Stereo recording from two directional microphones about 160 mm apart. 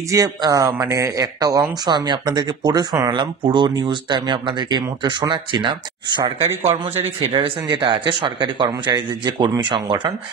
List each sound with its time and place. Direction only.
0.1 s a man's voice: 20° right (ahead or behind)